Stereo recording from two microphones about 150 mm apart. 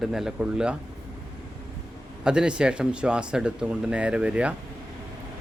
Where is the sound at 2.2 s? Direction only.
5° right (ahead or behind).